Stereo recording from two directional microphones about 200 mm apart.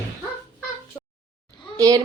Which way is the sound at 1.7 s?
20° right (ahead or behind).